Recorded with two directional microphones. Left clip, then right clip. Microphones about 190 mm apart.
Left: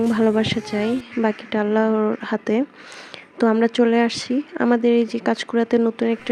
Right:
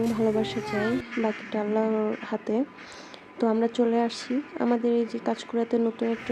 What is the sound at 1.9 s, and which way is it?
Speech, 60° left (ahead or behind).